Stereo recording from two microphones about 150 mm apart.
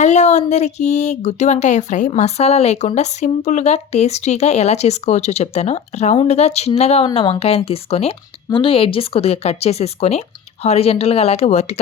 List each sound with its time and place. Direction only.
0.0 s speech: 50° left (ahead or behind)